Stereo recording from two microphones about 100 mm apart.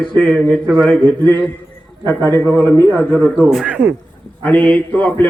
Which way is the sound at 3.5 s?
10° right (ahead or behind).